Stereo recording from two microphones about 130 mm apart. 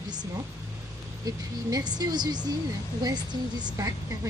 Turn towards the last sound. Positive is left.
turn(degrees=-25)  # may be behind; listen again after turning